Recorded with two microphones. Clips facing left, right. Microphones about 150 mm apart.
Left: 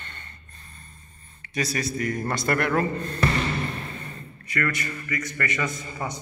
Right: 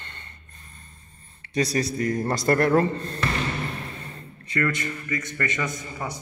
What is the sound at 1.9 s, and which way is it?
Speech, 30° right (ahead or behind).